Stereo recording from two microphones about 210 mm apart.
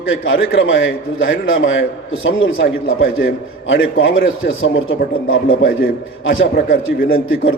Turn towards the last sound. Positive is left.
turn(degrees=70)  # may be behind; listen again after turning